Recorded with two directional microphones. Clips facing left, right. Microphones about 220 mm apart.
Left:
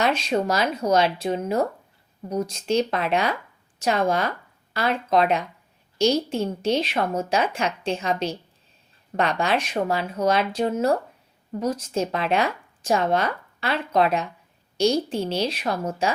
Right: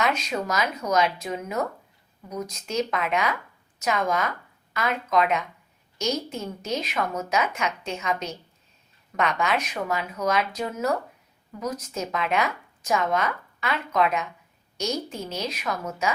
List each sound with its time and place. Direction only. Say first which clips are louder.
0.0 s speech: left 4 dB; 30° left (ahead or behind)